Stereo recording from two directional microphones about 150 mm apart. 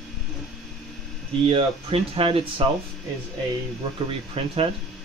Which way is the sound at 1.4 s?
40° right (ahead or behind).